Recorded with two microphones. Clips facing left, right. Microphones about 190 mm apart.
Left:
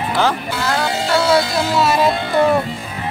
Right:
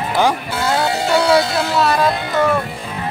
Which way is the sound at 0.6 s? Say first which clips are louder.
Right 2 dB; 20° right (ahead or behind).